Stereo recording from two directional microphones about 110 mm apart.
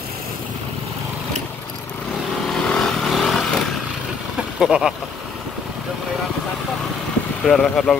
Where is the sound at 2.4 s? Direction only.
5° left (ahead or behind).